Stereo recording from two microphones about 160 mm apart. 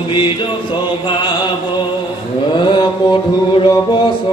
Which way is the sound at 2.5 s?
30° left (ahead or behind).